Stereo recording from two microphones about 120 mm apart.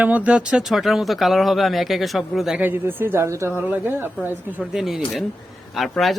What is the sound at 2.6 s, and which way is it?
Speech, 15° right (ahead or behind).